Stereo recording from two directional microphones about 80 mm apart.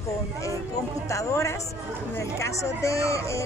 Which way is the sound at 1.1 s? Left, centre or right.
Left.